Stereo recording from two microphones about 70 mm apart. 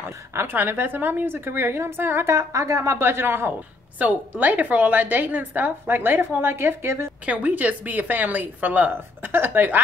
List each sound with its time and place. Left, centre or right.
0.0 s a woman's voice: right
2.3 s a woman's voice: right
3.1 s a woman's voice: right
7.2 s a woman's voice: right